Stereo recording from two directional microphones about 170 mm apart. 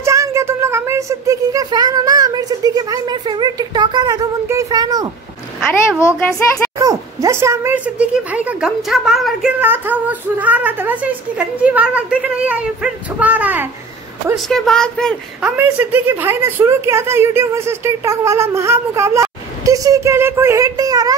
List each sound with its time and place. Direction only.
0.0 s a sound: 15° right (ahead or behind)
5.7 s a woman's voice: 15° left (ahead or behind)
6.8 s a woman's voice: 20° right (ahead or behind)
14.3 s speech: centre (ahead or behind)
15.4 s a woman's voice: 10° right (ahead or behind)